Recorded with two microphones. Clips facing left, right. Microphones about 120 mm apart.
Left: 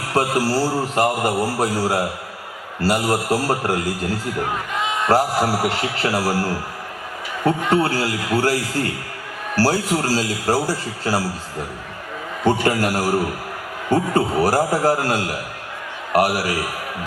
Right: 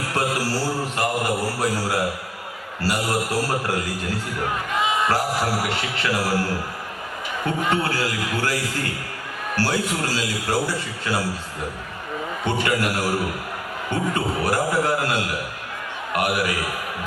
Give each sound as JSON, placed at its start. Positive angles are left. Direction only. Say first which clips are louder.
{"t": 0.1, "sound": "a man's voice", "louder": "left 6 dB", "side_deg": 35}
{"t": 4.7, "sound": "a sound", "louder": "right 1 dB", "side_deg": 0}
{"t": 5.0, "sound": "a man's voice", "louder": "left 5 dB", "side_deg": 40}
{"t": 7.7, "sound": "a man's voice", "louder": "left 4 dB", "side_deg": 35}
{"t": 12.5, "sound": "a man's voice", "louder": "left 5 dB", "side_deg": 35}